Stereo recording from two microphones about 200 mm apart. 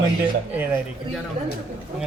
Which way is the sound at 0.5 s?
10° right (ahead or behind).